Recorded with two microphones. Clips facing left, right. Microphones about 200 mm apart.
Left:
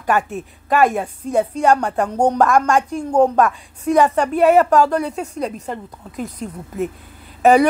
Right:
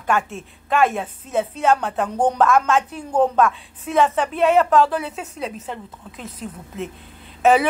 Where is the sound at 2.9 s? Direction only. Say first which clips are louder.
Left 4 dB; 10° left (ahead or behind).